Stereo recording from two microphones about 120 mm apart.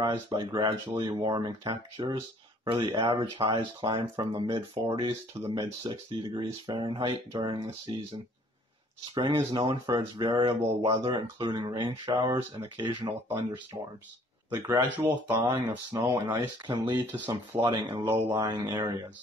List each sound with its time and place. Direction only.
0.0 s speech: 40° right (ahead or behind)
9.1 s speech: 45° right (ahead or behind)
14.9 s speech: 15° right (ahead or behind)
15.9 s speech: 30° right (ahead or behind)
17.3 s speech: 30° right (ahead or behind)
18.0 s speech: 30° right (ahead or behind)